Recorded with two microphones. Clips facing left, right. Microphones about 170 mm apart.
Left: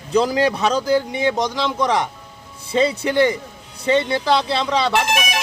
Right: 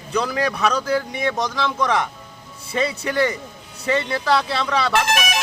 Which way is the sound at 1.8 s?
15° left (ahead or behind).